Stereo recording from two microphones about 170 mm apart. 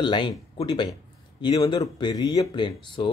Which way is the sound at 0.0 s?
25° left (ahead or behind).